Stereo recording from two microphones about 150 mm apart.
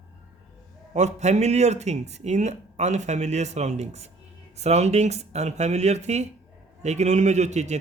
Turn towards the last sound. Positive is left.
turn(degrees=-50)  # may be behind; listen again after turning